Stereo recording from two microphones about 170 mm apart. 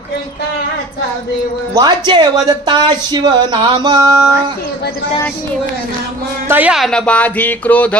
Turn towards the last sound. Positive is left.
turn(degrees=10)  # may be behind; listen again after turning